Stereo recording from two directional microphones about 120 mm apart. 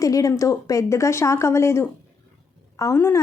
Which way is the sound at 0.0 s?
30° left (ahead or behind).